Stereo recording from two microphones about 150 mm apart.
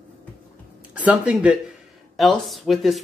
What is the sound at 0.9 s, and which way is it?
Speech, 10° right (ahead or behind).